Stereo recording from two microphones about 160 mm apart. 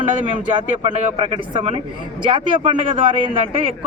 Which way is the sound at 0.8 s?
30° right (ahead or behind).